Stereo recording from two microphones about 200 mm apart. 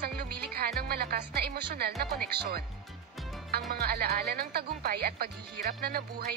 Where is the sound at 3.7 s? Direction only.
50° right (ahead or behind).